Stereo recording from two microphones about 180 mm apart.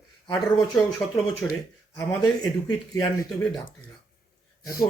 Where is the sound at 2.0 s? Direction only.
20° left (ahead or behind).